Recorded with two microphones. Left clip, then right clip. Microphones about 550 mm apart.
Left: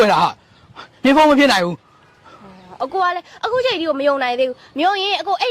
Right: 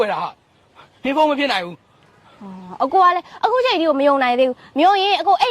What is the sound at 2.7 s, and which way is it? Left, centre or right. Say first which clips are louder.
Speech: right 5 dB; right.